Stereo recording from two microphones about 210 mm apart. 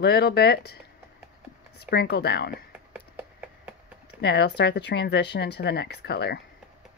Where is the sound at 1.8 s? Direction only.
50° left (ahead or behind).